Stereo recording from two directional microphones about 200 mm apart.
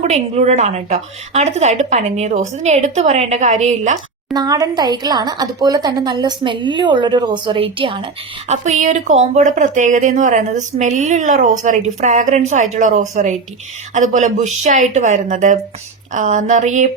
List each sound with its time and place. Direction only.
0.0 s a woman's voice: 35° right (ahead or behind)
4.4 s a woman's voice: 20° right (ahead or behind); by 16.9 s 40° right (ahead or behind)